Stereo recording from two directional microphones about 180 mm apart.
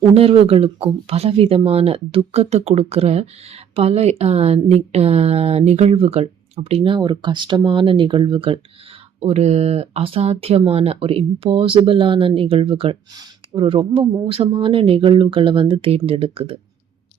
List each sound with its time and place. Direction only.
0.1 s speech: 35° right (ahead or behind)